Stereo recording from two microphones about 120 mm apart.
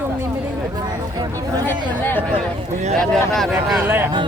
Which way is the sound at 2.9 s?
5° left (ahead or behind).